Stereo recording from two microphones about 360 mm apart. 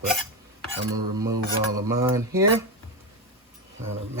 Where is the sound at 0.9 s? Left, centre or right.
Right.